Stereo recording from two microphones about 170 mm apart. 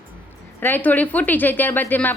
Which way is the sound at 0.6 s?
10° left (ahead or behind).